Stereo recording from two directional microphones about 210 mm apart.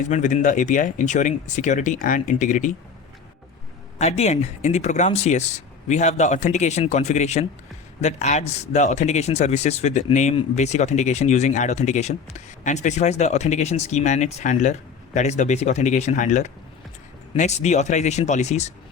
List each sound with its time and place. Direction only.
0.0 s speech: 35° left (ahead or behind)
3.9 s speech: 30° left (ahead or behind)